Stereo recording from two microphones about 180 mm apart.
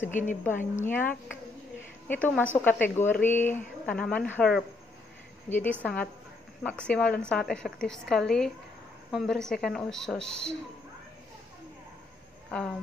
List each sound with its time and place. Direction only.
0.1 s a woman's voice: 45° left (ahead or behind)
0.8 s a woman's voice: 10° left (ahead or behind)
12.4 s speech: 5° left (ahead or behind)